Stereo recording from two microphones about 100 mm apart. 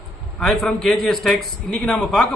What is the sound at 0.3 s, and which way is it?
A man's voice, centre (ahead or behind).